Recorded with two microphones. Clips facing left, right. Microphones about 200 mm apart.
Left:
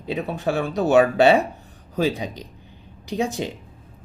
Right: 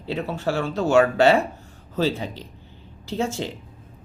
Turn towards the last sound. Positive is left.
turn(degrees=15)  # may be behind; listen again after turning